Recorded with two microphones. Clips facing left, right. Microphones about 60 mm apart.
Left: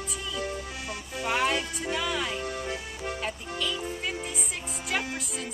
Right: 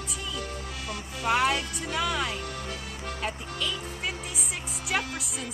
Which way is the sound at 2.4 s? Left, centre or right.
Left.